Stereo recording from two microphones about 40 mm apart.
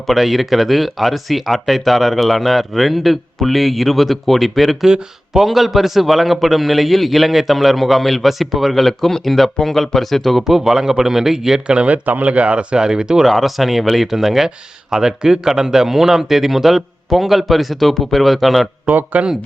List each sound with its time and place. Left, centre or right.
0.1 s a man's voice: centre
10.4 s speech: centre
11.6 s speech: right
12.0 s speech: right; by 13.2 s centre
13.2 s a man's voice: centre
18.9 s speech: right